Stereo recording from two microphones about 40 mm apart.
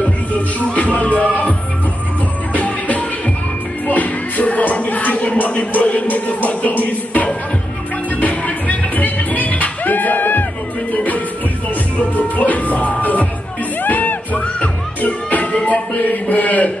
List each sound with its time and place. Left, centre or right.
0.0 s music: left
2.5 s music: left